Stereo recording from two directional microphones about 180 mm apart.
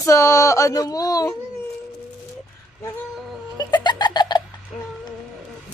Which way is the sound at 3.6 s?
25° left (ahead or behind).